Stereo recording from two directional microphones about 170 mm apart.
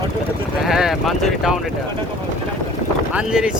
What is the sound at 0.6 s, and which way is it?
Clip-clop, centre (ahead or behind).